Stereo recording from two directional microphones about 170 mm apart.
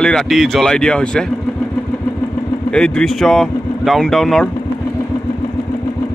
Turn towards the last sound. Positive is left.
turn(degrees=0)  # may be behind; listen again after turning